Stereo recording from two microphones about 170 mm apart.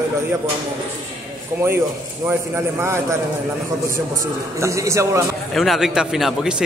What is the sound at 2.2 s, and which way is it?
Speech, 15° right (ahead or behind).